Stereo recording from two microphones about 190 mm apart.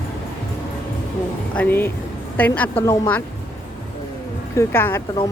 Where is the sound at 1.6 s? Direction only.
10° left (ahead or behind).